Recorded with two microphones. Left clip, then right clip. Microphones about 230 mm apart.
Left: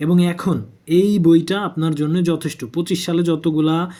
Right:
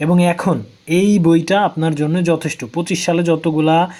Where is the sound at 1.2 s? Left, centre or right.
Centre.